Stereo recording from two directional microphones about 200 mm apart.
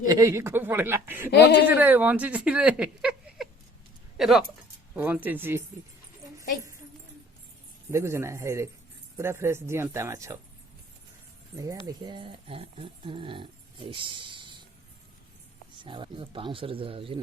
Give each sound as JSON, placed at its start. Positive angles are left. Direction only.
{"t": 0.1, "sound": "speech", "side_deg": -15}
{"t": 1.3, "sound": "speech", "side_deg": 55}
{"t": 1.8, "sound": "speech", "side_deg": -10}
{"t": 7.9, "sound": "speech", "side_deg": -15}
{"t": 11.5, "sound": "speech", "side_deg": -15}
{"t": 15.8, "sound": "speech", "side_deg": -25}